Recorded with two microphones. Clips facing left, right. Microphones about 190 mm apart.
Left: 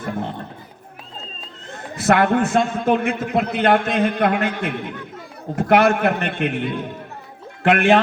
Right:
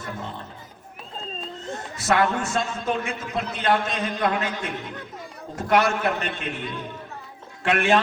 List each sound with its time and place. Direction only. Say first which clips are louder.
0.0 s chatter: left 7 dB; 55° left (ahead or behind)
2.0 s a man's voice: left 6 dB; 55° left (ahead or behind)
7.6 s a man's voice: left 6 dB; 55° left (ahead or behind)